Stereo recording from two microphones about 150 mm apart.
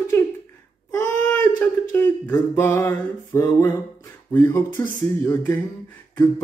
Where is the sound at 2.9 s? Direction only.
25° left (ahead or behind).